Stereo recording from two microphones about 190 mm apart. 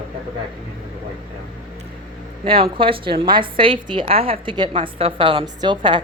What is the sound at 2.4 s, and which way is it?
A woman's voice, 30° right (ahead or behind).